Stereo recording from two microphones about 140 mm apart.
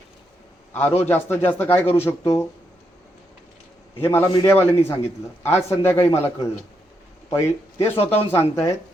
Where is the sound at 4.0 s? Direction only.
15° left (ahead or behind).